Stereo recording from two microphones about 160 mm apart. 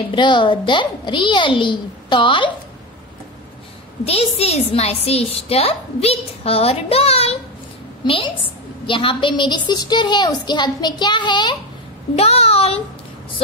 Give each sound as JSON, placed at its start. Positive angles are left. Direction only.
{"t": 0.1, "sound": "a woman's voice", "side_deg": 30}
{"t": 4.0, "sound": "a woman's voice", "side_deg": 40}
{"t": 12.2, "sound": "a woman's voice", "side_deg": 40}